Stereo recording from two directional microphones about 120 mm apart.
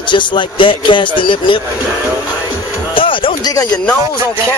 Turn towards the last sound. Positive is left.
turn(degrees=45)  # may be behind; listen again after turning